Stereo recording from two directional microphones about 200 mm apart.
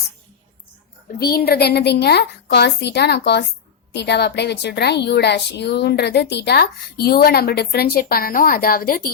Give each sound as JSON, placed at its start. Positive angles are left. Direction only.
{"t": 1.2, "sound": "a woman's voice", "side_deg": 50}